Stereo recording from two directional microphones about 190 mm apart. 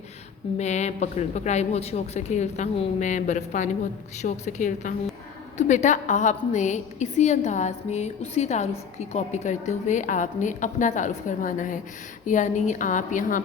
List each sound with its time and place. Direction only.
0.5 s a woman's voice: 35° left (ahead or behind)